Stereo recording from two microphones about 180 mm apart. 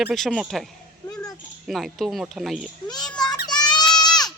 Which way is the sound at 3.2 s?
25° left (ahead or behind).